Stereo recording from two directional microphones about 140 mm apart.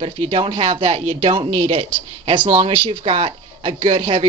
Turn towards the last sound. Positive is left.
turn(degrees=-40)  # may be behind; listen again after turning